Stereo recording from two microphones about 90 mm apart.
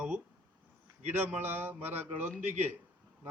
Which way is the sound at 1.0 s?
25° right (ahead or behind).